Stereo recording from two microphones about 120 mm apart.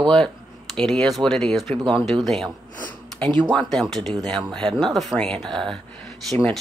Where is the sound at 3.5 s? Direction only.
5° left (ahead or behind).